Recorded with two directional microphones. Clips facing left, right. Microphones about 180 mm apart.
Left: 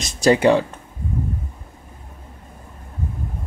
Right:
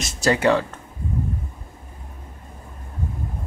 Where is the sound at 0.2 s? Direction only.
15° left (ahead or behind).